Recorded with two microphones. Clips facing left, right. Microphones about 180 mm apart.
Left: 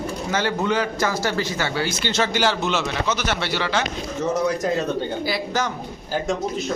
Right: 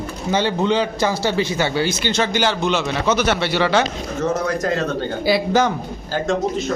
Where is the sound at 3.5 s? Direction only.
65° right (ahead or behind).